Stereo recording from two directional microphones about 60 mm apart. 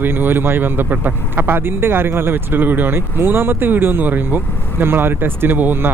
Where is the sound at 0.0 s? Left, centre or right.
Right.